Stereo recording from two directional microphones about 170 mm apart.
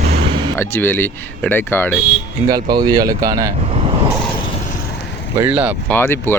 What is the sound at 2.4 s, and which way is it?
Speech, 25° right (ahead or behind).